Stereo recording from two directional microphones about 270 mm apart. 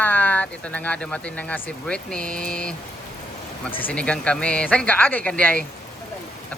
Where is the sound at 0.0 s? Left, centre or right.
Centre.